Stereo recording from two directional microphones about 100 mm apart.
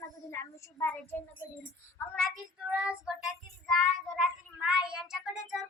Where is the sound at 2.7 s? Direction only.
10° right (ahead or behind).